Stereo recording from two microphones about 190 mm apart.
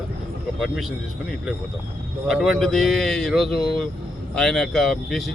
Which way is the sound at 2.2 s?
Centre (ahead or behind).